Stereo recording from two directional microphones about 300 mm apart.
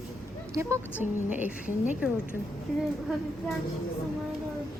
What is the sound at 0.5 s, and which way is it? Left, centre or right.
A woman's voice, centre.